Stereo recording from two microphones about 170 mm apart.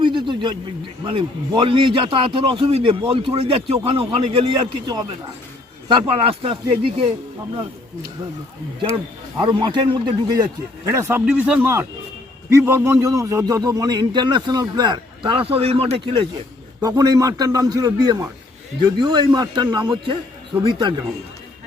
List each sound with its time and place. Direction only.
0.0 s a sound: 30° right (ahead or behind)
1.0 s a man's voice: 30° right (ahead or behind)
9.4 s a man's voice: 25° right (ahead or behind)
11.3 s a man's voice: 5° right (ahead or behind); by 16.2 s 35° right (ahead or behind)
16.8 s a man's voice: 20° right (ahead or behind)